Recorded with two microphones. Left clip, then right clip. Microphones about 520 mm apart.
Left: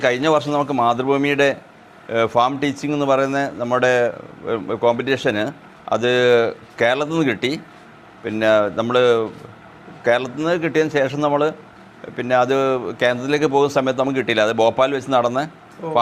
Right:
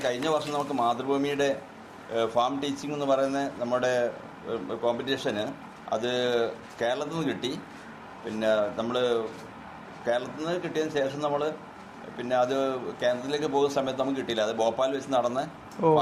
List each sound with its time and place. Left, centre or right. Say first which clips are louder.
0.0 s a man's voice: left 10 dB; left
15.8 s speech: right 2 dB; right